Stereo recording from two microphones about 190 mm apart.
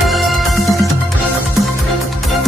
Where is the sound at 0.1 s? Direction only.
Centre (ahead or behind).